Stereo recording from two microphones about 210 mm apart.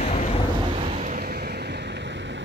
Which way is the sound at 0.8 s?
30° right (ahead or behind).